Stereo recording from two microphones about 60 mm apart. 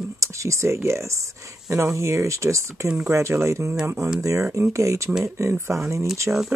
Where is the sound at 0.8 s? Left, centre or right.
Right.